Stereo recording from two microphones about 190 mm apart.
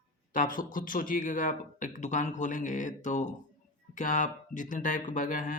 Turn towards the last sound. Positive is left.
turn(degrees=45)  # may be behind; listen again after turning